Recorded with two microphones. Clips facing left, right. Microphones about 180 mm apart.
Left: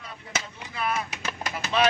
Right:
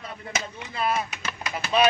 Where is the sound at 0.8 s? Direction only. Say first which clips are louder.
Right 3 dB; 30° right (ahead or behind).